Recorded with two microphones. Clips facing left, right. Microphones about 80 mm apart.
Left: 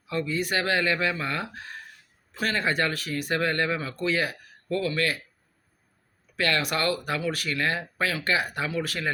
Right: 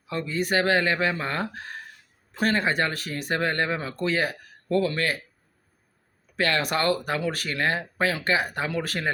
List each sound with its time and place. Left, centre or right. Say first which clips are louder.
0.1 s speech: right 1 dB; right
2.4 s speech: right 2 dB; right
6.3 s speech: right 2 dB; right